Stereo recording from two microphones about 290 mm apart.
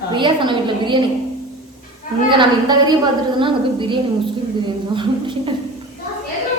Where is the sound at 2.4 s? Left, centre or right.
Centre.